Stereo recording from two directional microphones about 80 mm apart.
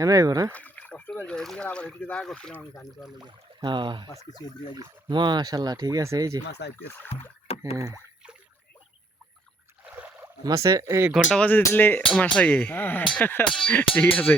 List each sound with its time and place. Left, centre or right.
0.0 s speech: right
0.5 s a sound: centre
1.1 s speech: centre
3.2 s speech: right
4.8 s speech: right
7.6 s speech: right
9.8 s rowboat: centre
10.4 s speech: right
11.3 s speech: centre
13.4 s speech: centre
13.9 s speech: centre